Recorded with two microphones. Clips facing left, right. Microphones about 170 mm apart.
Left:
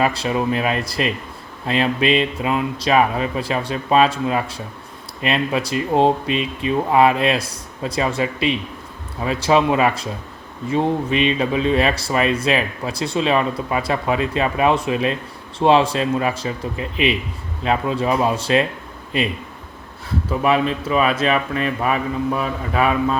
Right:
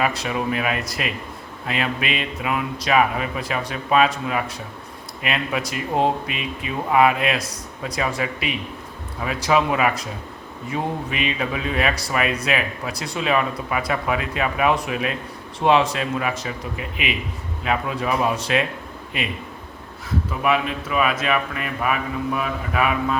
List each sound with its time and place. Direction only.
0.0 s speech: 30° left (ahead or behind)
17.6 s speech: 30° left (ahead or behind)
20.4 s speech: 30° left (ahead or behind)